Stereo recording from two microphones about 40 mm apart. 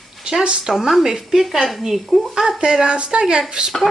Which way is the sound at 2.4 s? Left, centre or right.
Centre.